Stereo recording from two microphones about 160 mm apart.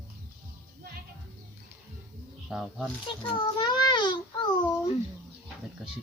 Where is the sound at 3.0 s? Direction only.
30° left (ahead or behind).